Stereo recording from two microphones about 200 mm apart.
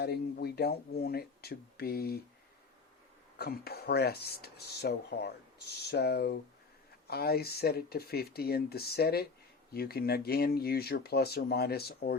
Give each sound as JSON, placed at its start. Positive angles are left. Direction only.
{"t": 0.0, "sound": "speech", "side_deg": 55}
{"t": 3.3, "sound": "speech", "side_deg": 50}